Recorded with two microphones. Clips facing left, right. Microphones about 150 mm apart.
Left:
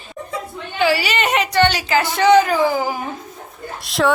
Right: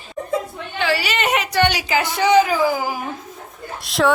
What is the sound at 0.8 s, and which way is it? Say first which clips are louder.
A woman's voice: left 3 dB; 5° left (ahead or behind).